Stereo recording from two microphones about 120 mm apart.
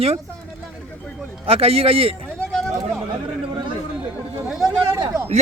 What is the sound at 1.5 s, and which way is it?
Speech, 50° right (ahead or behind).